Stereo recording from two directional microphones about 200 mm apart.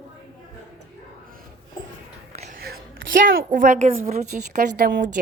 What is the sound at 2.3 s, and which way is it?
Music, 30° right (ahead or behind).